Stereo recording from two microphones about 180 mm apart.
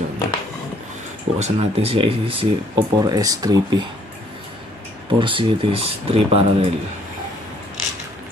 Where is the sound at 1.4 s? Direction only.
35° right (ahead or behind).